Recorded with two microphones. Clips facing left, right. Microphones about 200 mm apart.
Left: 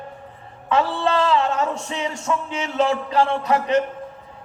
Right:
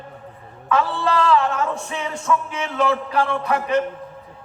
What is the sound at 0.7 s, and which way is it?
Music, 25° left (ahead or behind).